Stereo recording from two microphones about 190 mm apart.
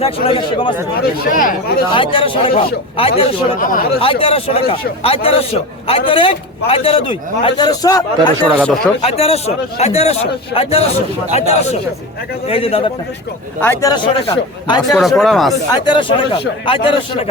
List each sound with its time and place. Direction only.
0.0 s speech: 30° left (ahead or behind)
0.9 s speech: 55° left (ahead or behind)
1.9 s speech: 25° left (ahead or behind)
3.6 s speech: 45° left (ahead or behind)
4.0 s speech: 30° left (ahead or behind)
8.4 s speech: centre (ahead or behind)
9.0 s speech: 30° left (ahead or behind)
13.6 s speech: 10° left (ahead or behind)
13.9 s speech: 20° left (ahead or behind)
14.9 s speech: centre (ahead or behind)
15.7 s speech: 25° left (ahead or behind)